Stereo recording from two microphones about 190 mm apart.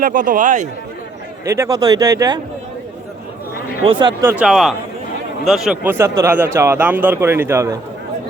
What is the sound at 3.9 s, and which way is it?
Speech, 25° right (ahead or behind).